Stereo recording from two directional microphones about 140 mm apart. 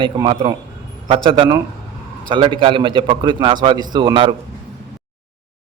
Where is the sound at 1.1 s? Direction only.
40° right (ahead or behind).